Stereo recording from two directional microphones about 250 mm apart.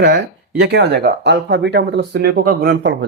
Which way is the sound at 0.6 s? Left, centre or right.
Right.